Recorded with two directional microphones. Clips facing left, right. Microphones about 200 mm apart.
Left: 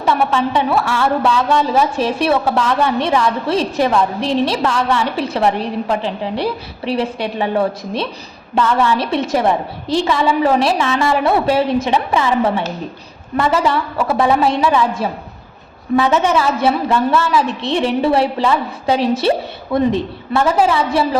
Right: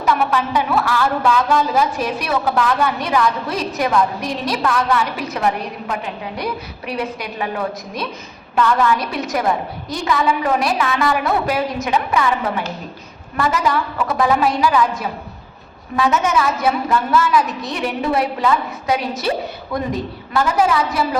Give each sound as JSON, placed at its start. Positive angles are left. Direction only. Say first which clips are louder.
{"t": 0.0, "sound": "a woman's voice", "louder": "left 2 dB", "side_deg": 30}